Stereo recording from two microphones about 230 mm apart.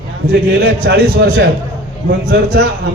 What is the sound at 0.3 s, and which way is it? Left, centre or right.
A man's voice, right.